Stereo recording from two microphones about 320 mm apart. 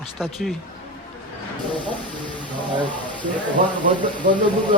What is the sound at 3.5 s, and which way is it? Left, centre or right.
Speech, right.